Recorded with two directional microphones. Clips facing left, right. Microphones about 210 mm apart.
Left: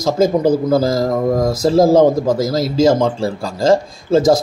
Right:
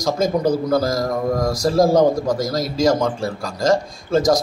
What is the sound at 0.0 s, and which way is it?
Speech, 25° left (ahead or behind).